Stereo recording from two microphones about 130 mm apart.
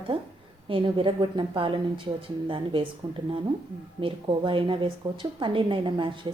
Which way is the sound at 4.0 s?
40° right (ahead or behind).